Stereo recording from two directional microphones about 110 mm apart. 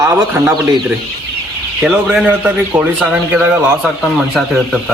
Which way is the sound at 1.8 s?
Centre (ahead or behind).